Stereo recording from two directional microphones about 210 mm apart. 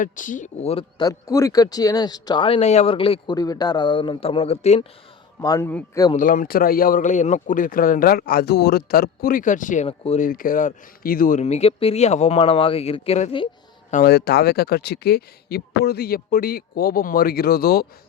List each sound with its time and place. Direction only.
0.0 s speech: 40° left (ahead or behind)
5.4 s speech: 15° left (ahead or behind)
6.1 s speech: 40° left (ahead or behind)
10.2 s speech: 40° left (ahead or behind)
13.9 s speech: 50° left (ahead or behind)